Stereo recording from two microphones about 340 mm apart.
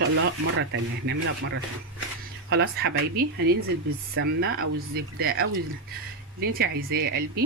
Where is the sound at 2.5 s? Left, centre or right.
Right.